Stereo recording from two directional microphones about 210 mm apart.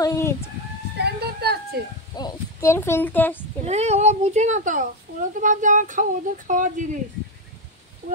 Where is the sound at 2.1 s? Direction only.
15° left (ahead or behind).